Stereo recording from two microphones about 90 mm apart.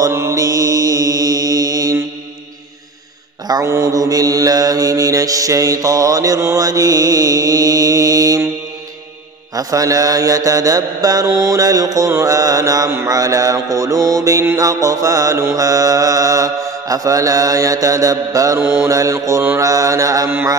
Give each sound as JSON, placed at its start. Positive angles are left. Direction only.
{"t": 0.0, "sound": "mantra", "side_deg": -30}
{"t": 3.6, "sound": "mantra", "side_deg": -30}
{"t": 9.6, "sound": "mantra", "side_deg": -40}
{"t": 18.6, "sound": "mantra", "side_deg": -25}